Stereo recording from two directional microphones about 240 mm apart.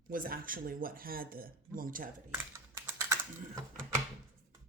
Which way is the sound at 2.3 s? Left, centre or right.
Centre.